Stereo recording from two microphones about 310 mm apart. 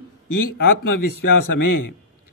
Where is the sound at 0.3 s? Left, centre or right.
Left.